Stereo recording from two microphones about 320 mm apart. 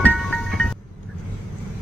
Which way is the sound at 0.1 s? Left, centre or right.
Centre.